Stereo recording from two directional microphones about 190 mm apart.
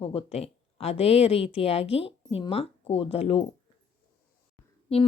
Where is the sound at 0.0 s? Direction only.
30° left (ahead or behind).